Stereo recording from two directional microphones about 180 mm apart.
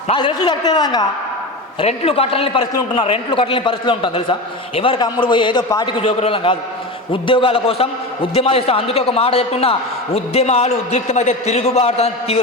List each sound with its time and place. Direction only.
0.1 s a man's voice: 25° left (ahead or behind)
1.8 s a man's voice: 35° left (ahead or behind)